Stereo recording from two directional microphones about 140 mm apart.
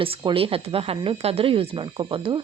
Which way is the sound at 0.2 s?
35° right (ahead or behind).